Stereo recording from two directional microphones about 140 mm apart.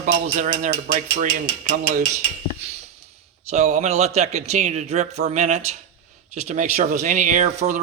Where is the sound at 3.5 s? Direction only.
55° right (ahead or behind).